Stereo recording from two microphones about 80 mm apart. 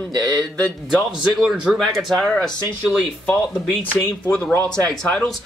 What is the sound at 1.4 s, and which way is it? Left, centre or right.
Speech, centre.